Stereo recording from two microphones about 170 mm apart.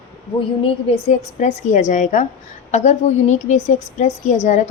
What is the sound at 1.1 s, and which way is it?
A woman's voice, 45° left (ahead or behind).